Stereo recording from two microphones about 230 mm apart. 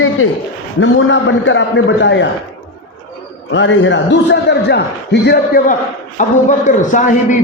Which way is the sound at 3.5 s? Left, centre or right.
Left.